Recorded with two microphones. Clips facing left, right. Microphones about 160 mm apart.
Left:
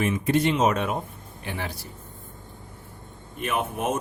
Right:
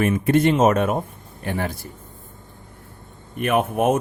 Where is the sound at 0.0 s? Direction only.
55° right (ahead or behind).